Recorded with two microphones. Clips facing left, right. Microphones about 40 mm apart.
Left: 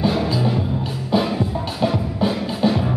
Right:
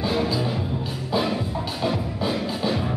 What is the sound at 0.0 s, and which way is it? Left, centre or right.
Music, centre.